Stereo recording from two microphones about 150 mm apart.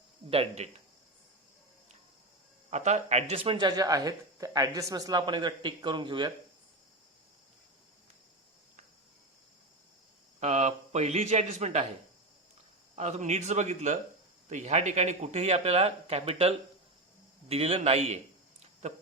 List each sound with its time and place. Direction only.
0.3 s speech: 45° right (ahead or behind)
2.6 s speech: 50° right (ahead or behind); by 6.3 s 30° right (ahead or behind)
10.4 s speech: 50° right (ahead or behind)
13.0 s speech: 50° right (ahead or behind)
18.6 s a sound: 50° right (ahead or behind)